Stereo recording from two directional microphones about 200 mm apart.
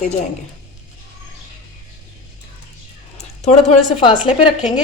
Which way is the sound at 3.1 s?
35° left (ahead or behind).